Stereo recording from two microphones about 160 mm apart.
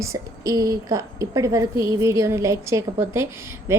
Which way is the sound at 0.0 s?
20° right (ahead or behind).